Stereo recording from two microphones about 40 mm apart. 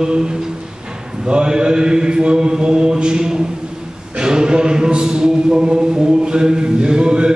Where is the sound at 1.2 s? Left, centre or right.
Right.